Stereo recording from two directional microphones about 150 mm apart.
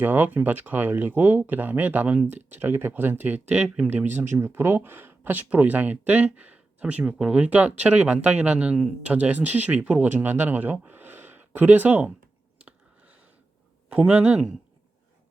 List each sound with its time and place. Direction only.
0.0 s speech: 10° right (ahead or behind)
13.9 s speech: 10° right (ahead or behind)